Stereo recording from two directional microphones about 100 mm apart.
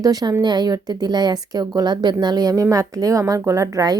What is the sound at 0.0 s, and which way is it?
A woman's voice, 40° right (ahead or behind).